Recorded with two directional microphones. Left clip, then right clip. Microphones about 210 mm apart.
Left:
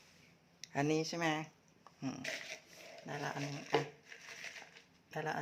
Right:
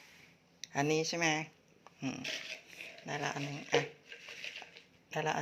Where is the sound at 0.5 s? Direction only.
10° left (ahead or behind).